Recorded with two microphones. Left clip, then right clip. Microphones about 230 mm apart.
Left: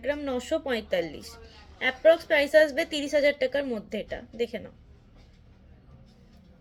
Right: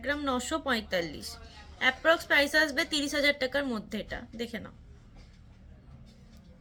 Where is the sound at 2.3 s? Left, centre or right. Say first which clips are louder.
Left 4 dB; right.